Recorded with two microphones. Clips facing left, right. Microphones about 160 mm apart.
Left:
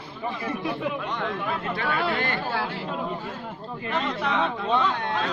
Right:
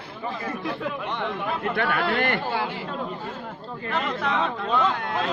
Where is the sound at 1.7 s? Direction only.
55° right (ahead or behind).